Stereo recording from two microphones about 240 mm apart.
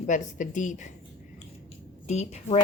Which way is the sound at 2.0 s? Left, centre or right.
Left.